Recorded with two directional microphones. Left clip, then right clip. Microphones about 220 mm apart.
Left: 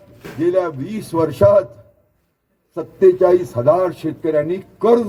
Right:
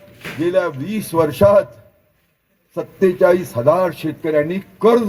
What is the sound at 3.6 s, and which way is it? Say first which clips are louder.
Speech: even; 35° right (ahead or behind).